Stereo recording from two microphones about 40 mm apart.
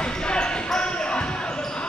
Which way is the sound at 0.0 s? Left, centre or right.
Left.